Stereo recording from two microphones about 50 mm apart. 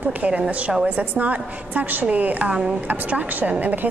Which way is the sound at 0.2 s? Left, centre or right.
Right.